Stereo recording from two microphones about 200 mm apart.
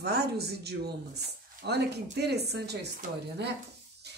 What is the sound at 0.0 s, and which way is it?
Speech, 55° right (ahead or behind).